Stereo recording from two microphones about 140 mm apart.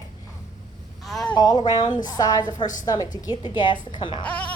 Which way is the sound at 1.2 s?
30° left (ahead or behind).